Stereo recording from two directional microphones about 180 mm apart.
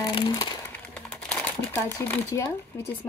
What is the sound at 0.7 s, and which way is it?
Typing, 5° left (ahead or behind).